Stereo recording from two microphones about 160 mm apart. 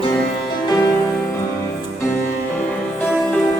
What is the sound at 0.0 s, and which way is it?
Music, 30° left (ahead or behind).